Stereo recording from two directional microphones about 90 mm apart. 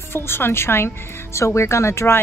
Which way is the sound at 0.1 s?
25° left (ahead or behind).